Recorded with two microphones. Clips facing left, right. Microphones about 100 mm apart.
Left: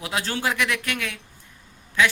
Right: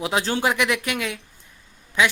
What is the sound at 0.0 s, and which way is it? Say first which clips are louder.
Speech: right 4 dB; 20° right (ahead or behind).